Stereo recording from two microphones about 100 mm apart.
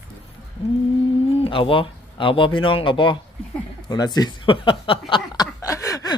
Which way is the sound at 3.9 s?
45° left (ahead or behind).